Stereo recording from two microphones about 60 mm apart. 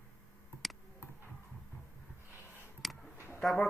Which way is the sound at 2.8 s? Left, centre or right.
Centre.